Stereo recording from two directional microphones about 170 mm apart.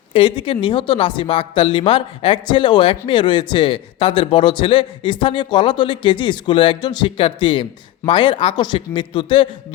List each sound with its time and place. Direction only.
0.1 s a man's voice: 30° left (ahead or behind)